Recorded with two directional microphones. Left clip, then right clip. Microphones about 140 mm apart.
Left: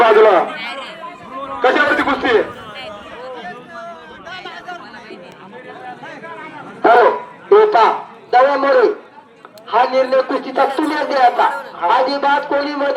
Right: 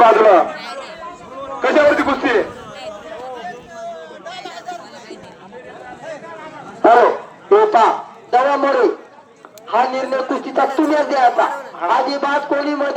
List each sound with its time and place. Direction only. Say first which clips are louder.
0.0 s a man's voice: even; 90° right
0.5 s a sound: left 3 dB; 30° right (ahead or behind)
1.4 s chatter: left 2 dB; 30° right (ahead or behind)
1.6 s speech: right 1 dB; 90° right
6.8 s a man's voice: even; 90° right